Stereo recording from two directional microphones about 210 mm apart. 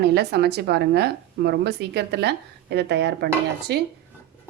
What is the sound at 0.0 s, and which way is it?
A woman's voice, 50° right (ahead or behind).